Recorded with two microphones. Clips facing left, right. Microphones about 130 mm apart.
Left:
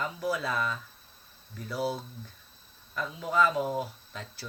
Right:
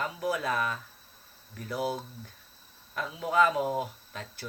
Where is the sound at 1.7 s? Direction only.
15° right (ahead or behind).